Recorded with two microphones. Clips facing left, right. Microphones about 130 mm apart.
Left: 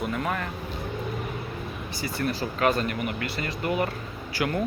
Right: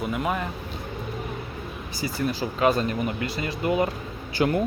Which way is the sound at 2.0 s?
20° right (ahead or behind).